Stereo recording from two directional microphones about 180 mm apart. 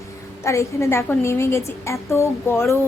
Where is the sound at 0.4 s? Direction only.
15° left (ahead or behind).